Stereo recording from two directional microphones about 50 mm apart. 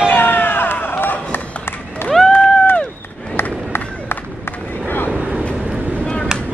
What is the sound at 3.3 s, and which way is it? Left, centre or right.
Run, left.